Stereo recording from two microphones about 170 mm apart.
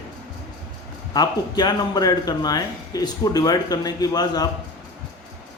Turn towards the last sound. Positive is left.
turn(degrees=20)  # may be behind; listen again after turning